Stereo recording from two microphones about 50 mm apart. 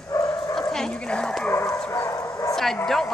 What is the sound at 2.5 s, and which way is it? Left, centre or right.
Bow-wow, centre.